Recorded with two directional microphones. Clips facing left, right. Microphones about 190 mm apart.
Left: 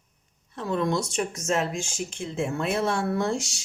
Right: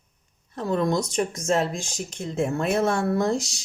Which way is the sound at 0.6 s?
40° right (ahead or behind).